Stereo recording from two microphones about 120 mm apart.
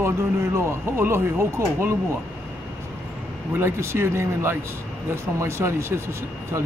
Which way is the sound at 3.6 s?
20° right (ahead or behind).